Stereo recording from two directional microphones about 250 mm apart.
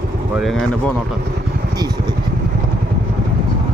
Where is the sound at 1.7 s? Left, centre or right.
Centre.